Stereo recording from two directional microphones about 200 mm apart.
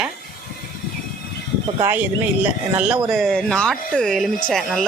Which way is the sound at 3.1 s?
Centre (ahead or behind).